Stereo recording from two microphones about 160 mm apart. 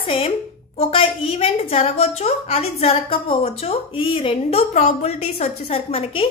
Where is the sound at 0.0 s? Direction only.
35° left (ahead or behind).